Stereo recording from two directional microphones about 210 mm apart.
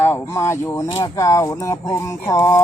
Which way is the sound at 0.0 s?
10° left (ahead or behind).